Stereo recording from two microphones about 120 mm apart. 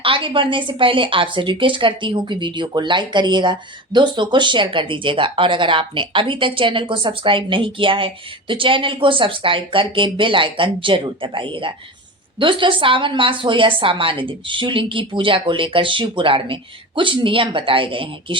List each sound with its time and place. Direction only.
0.0 s speech: 45° right (ahead or behind)